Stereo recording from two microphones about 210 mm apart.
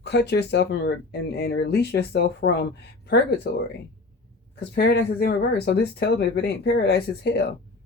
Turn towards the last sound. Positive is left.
turn(degrees=50)  # may be behind; listen again after turning